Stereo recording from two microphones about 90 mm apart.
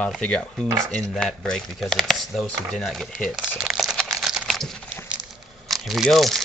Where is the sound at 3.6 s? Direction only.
5° right (ahead or behind).